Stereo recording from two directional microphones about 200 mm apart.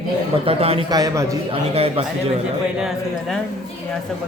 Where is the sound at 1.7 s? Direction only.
30° right (ahead or behind).